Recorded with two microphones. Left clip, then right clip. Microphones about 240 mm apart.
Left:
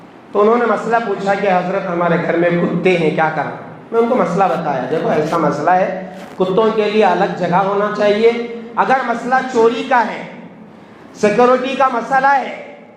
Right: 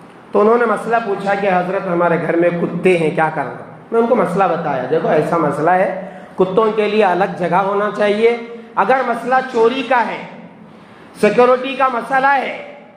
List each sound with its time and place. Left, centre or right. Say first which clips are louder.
0.3 s a man's voice: even; right
11.2 s a man's voice: even; right